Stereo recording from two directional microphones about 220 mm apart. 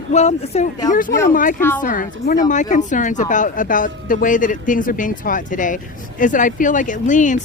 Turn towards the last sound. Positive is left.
turn(degrees=35)  # may be behind; listen again after turning